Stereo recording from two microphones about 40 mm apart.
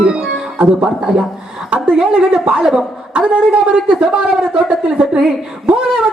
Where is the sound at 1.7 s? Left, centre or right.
Right.